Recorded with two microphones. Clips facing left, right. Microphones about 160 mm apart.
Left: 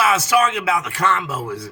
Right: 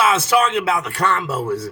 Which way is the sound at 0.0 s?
30° right (ahead or behind).